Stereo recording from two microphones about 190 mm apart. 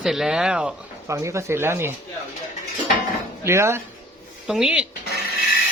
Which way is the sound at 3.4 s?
15° right (ahead or behind).